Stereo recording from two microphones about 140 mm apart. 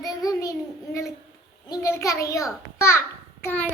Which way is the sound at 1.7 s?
25° left (ahead or behind).